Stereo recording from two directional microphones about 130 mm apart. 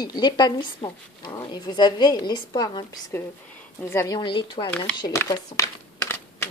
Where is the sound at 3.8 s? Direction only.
20° left (ahead or behind).